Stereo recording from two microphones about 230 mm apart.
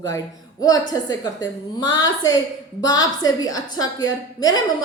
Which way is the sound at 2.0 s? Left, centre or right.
Centre.